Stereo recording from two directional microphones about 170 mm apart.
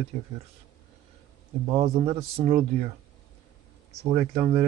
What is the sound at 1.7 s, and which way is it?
Speech, 35° right (ahead or behind).